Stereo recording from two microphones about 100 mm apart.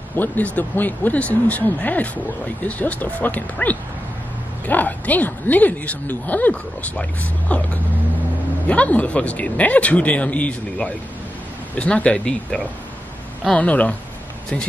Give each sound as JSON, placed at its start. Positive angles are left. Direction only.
{"t": 0.1, "sound": "a woman's voice", "side_deg": 15}